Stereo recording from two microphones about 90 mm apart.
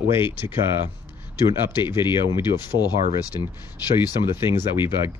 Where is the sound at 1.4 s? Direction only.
55° left (ahead or behind).